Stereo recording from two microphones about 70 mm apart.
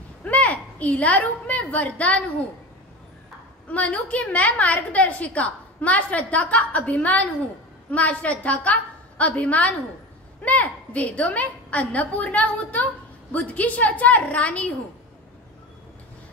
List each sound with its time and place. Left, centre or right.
0.2 s a woman's voice: centre
3.7 s a woman's voice: centre